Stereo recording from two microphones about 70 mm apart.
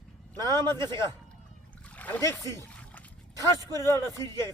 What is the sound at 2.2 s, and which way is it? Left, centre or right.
Speech, left.